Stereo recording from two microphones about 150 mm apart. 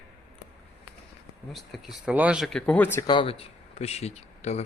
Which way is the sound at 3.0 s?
35° left (ahead or behind).